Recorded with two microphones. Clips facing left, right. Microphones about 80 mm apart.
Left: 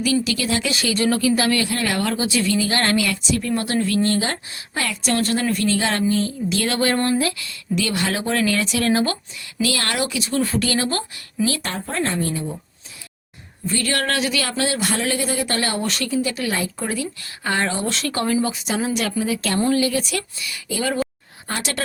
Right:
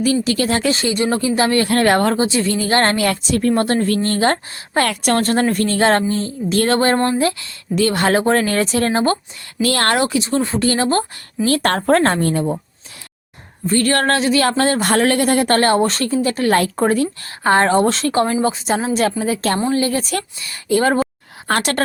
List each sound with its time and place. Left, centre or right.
0.0 s speech: right
0.9 s speech: right
1.6 s speech: right
9.6 s speech: right
11.4 s speech: right
11.7 s a woman's voice: right
13.7 s speech: right
21.5 s a woman's voice: right